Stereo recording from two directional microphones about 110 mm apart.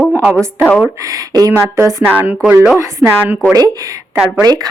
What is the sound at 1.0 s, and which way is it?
A woman's voice, 35° right (ahead or behind).